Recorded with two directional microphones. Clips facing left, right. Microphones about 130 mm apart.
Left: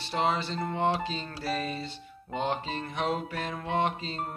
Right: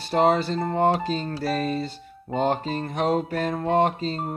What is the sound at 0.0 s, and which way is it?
Music, 45° right (ahead or behind).